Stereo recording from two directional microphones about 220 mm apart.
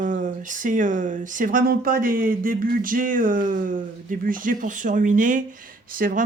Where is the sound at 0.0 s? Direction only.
35° right (ahead or behind).